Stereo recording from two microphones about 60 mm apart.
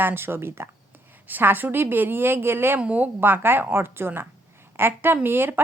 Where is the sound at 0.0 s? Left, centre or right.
Right.